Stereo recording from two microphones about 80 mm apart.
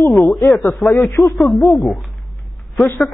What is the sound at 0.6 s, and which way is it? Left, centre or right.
Speech, left.